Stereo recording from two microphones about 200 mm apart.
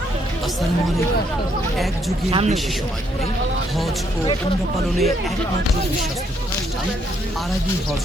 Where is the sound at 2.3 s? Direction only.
30° right (ahead or behind).